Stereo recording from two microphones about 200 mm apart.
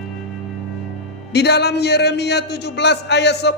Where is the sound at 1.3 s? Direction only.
55° left (ahead or behind).